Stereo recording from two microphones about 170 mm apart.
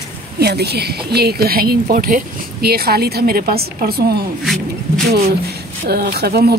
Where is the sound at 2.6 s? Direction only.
65° right (ahead or behind).